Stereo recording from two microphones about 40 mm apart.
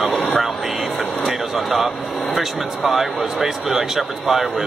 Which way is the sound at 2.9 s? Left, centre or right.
Centre.